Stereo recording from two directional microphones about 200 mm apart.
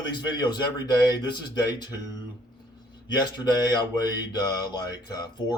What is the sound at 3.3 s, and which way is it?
A man's voice, 20° left (ahead or behind).